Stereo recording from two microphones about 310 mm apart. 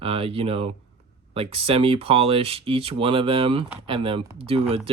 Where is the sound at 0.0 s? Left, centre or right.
Centre.